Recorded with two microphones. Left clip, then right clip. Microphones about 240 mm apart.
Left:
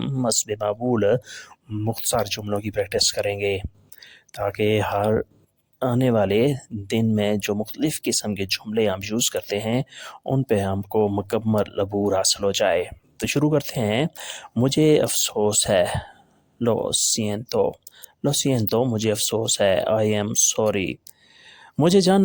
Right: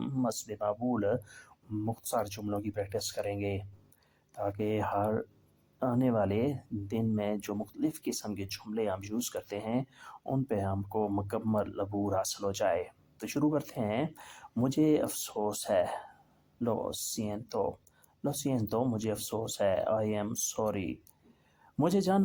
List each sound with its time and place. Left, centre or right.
0.0 s speech: left